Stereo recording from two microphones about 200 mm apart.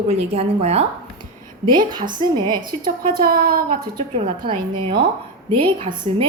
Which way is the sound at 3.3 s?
45° right (ahead or behind).